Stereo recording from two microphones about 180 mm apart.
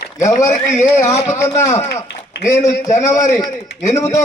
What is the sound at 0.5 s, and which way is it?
Speech, 45° left (ahead or behind).